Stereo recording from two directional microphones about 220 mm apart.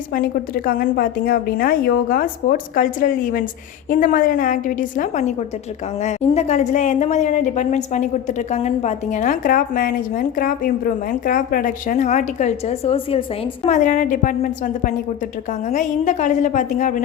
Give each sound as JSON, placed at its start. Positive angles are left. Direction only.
{"t": 0.1, "sound": "a woman's voice", "side_deg": 40}